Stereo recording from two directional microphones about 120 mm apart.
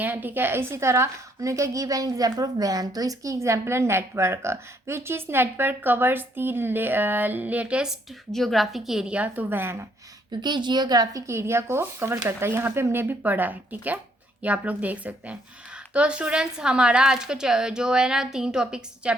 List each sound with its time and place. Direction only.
0.0 s a woman's voice: 15° right (ahead or behind)
10.4 s a woman's voice: 40° right (ahead or behind); by 19.1 s 5° right (ahead or behind)